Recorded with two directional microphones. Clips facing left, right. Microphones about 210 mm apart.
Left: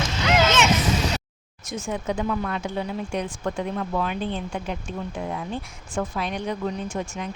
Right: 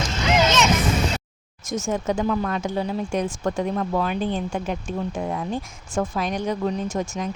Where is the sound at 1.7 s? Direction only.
45° right (ahead or behind).